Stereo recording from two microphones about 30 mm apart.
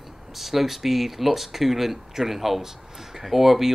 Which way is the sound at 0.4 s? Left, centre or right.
Centre.